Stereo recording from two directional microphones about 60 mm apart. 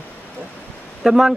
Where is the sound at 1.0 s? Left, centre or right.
Centre.